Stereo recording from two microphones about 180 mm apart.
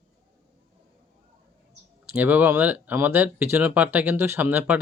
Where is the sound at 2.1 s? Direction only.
10° right (ahead or behind).